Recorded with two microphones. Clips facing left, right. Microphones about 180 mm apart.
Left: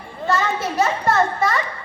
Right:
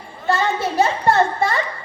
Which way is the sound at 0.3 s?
30° right (ahead or behind).